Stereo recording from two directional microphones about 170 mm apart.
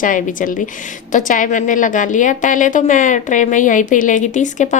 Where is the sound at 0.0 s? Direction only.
50° left (ahead or behind).